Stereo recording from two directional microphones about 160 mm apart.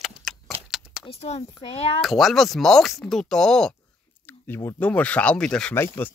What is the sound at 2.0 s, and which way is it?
Speech, centre (ahead or behind).